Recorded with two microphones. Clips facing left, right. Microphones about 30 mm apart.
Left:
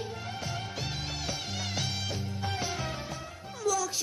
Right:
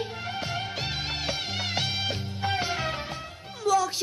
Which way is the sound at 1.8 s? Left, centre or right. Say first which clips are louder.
Right 5 dB; right.